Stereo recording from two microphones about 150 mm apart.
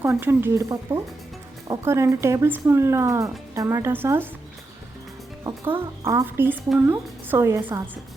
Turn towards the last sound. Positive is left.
turn(degrees=-20)  # may be behind; listen again after turning